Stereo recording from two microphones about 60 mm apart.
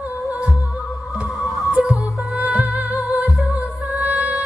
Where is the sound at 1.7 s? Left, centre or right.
Centre.